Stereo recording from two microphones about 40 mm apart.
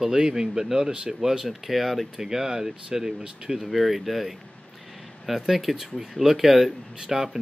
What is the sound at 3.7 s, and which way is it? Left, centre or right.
Speech, centre.